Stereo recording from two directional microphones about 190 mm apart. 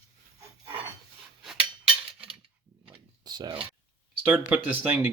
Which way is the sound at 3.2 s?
20° right (ahead or behind).